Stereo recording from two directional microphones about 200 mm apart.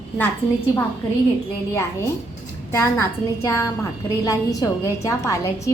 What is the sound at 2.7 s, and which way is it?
A woman's voice, 15° left (ahead or behind).